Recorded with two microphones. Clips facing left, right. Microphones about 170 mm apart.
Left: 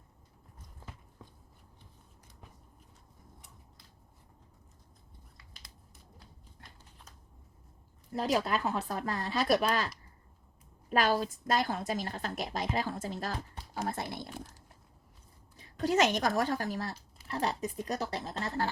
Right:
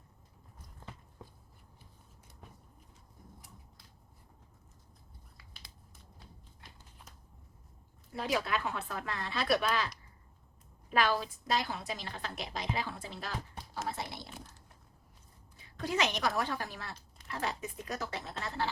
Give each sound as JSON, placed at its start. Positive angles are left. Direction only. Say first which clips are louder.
{"t": 8.1, "sound": "a woman's voice", "louder": "left 3 dB", "side_deg": 35}
{"t": 15.5, "sound": "a woman's voice", "louder": "left 6 dB", "side_deg": 40}